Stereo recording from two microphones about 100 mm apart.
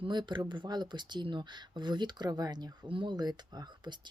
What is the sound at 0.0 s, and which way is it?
Speech, 50° right (ahead or behind).